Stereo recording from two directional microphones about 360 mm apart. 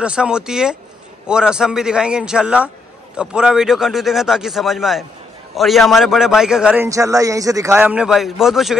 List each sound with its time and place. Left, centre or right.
0.0 s a man's voice: centre